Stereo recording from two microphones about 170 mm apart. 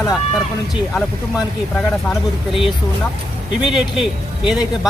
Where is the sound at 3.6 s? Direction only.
Centre (ahead or behind).